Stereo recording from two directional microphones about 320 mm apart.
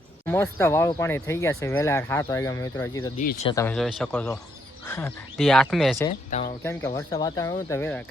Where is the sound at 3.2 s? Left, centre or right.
Left.